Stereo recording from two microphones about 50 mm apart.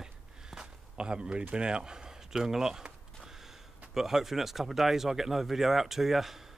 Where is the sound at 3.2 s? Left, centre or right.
Centre.